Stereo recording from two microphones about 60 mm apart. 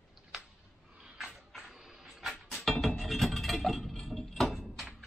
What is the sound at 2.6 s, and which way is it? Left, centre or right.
Glass, centre.